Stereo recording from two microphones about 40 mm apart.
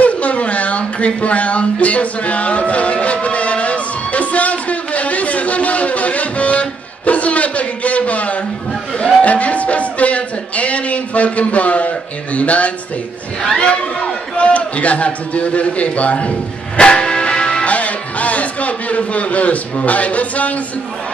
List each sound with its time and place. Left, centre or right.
0.0 s a sound: left
8.9 s speech: left
17.6 s speech: left